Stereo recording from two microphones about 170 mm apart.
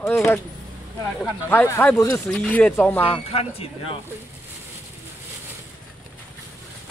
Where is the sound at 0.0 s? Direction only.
15° left (ahead or behind).